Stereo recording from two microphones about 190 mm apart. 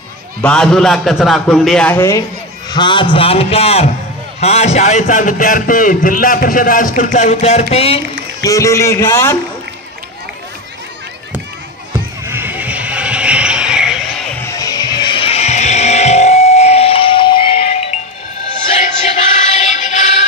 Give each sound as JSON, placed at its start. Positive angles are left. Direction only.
{"t": 0.4, "sound": "a man's voice", "side_deg": 5}
{"t": 2.7, "sound": "a man's voice", "side_deg": 25}
{"t": 8.4, "sound": "speech", "side_deg": 15}
{"t": 12.3, "sound": "a sound", "side_deg": -10}
{"t": 14.4, "sound": "music", "side_deg": 15}
{"t": 18.8, "sound": "music", "side_deg": 35}